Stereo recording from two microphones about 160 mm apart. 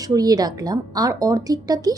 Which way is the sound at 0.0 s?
25° right (ahead or behind).